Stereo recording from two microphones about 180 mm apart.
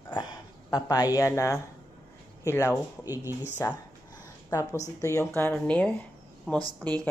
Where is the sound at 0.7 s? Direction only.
20° left (ahead or behind).